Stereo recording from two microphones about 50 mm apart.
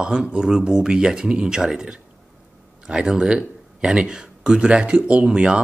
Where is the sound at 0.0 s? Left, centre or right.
Centre.